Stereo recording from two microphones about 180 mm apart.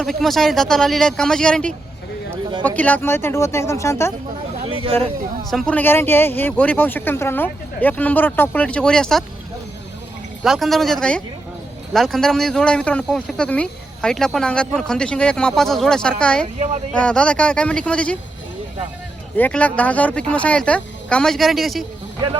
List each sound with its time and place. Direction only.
0.0 s speech: centre (ahead or behind)
4.6 s a sound: 30° right (ahead or behind)
5.5 s speech: 5° left (ahead or behind)
10.4 s speech: centre (ahead or behind)
19.4 s speech: 10° left (ahead or behind)